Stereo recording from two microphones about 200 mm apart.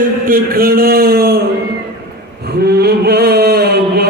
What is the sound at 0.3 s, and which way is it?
A man's voice, 45° right (ahead or behind).